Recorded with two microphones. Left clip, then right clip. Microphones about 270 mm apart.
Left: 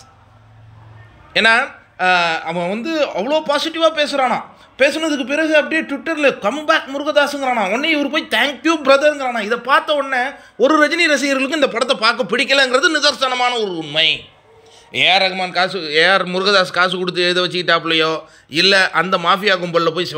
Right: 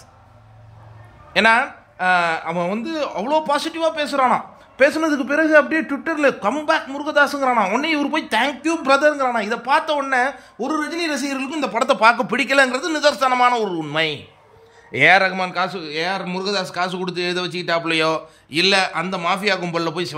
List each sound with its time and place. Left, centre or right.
1.3 s speech: centre
10.8 s a man's voice: centre